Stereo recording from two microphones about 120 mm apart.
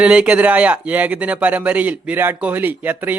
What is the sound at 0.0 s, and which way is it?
Speech, 10° right (ahead or behind).